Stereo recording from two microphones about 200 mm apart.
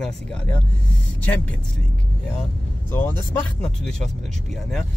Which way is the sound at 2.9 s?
10° left (ahead or behind).